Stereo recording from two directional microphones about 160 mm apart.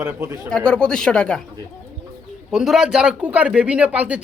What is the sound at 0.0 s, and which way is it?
Speech, 15° right (ahead or behind).